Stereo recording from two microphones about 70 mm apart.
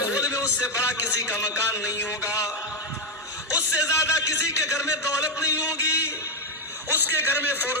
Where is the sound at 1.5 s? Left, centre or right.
Left.